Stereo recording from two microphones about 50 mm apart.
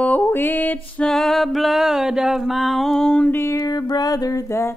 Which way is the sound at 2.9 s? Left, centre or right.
Centre.